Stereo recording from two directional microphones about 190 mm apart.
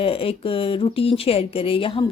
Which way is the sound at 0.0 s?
30° left (ahead or behind).